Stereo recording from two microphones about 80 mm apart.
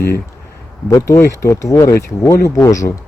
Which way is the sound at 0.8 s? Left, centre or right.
Left.